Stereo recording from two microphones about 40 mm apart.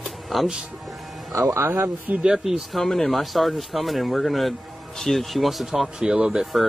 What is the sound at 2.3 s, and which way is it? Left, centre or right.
Speech, centre.